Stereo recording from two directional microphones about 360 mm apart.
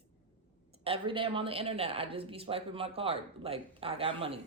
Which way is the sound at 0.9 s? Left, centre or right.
Centre.